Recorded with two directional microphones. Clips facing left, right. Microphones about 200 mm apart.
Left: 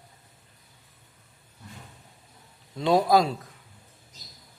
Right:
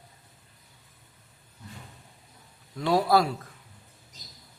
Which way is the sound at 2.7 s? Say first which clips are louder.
Left 2 dB; 20° left (ahead or behind).